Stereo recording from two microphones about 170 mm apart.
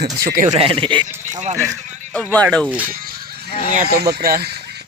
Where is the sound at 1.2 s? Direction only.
45° right (ahead or behind).